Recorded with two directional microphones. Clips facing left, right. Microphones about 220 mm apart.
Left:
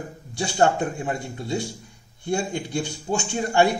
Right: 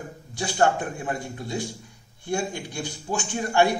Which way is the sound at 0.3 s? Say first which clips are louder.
Left 2 dB; 25° left (ahead or behind).